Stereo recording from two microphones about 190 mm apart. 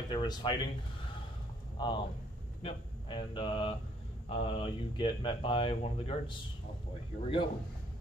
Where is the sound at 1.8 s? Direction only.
25° left (ahead or behind).